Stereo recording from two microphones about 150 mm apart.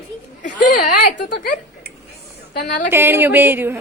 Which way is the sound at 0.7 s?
75° left (ahead or behind).